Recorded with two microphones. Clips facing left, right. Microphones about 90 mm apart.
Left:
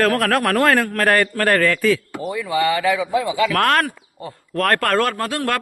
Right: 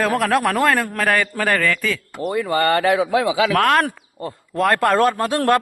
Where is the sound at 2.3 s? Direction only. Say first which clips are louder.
Right 2 dB; 50° right (ahead or behind); by 3.5 s 90° right.